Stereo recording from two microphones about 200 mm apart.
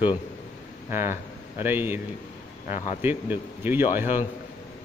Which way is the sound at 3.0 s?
10° right (ahead or behind).